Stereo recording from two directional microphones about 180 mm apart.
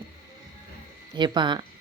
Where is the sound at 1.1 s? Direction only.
25° right (ahead or behind).